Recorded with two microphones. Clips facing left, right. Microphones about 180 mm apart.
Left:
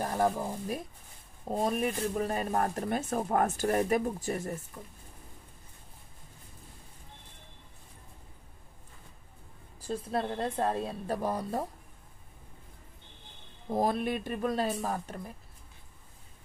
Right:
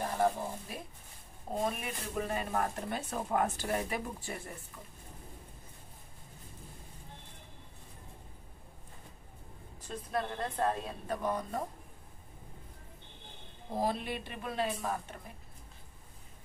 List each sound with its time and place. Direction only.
0.0 s speech: 40° left (ahead or behind)
9.8 s a woman's voice: 30° left (ahead or behind)
13.7 s speech: 50° left (ahead or behind)